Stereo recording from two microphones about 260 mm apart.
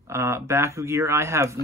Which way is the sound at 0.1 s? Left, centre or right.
Centre.